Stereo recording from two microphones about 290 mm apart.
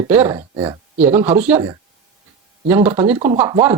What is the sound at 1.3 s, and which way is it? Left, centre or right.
Speech, centre.